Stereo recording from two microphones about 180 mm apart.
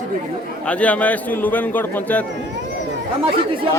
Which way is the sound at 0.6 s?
5° left (ahead or behind).